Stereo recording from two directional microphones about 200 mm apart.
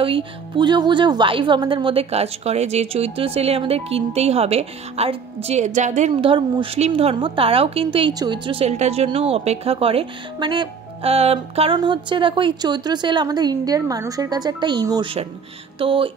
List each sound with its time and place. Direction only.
0.0 s a woman's voice: 25° right (ahead or behind)